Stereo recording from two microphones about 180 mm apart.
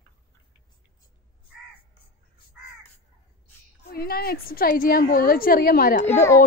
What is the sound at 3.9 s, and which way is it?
A woman's voice, 60° left (ahead or behind).